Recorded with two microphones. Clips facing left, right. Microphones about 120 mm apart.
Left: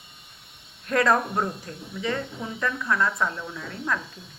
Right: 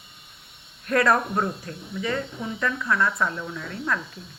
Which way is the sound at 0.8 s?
20° left (ahead or behind).